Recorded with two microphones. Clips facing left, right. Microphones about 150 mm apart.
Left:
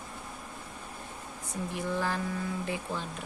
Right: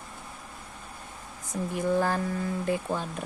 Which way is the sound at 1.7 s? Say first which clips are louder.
Right 6 dB; 45° right (ahead or behind).